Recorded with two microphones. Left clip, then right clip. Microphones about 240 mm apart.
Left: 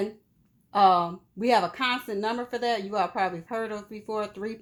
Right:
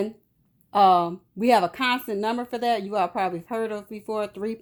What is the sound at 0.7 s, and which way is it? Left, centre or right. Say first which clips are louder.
A woman's voice: right 3 dB; right.